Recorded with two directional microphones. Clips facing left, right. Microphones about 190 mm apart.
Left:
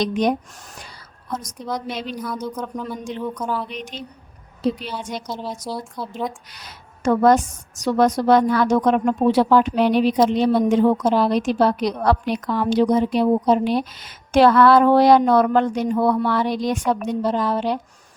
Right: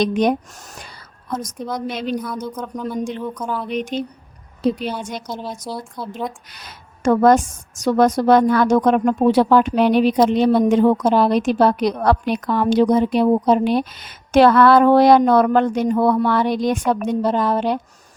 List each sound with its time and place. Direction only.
0.0 s a woman's voice: 55° right (ahead or behind)
2.2 s speech: centre (ahead or behind)
3.7 s a woman's voice: 50° right (ahead or behind)
5.6 s speech: centre (ahead or behind)
6.5 s a woman's voice: 55° right (ahead or behind)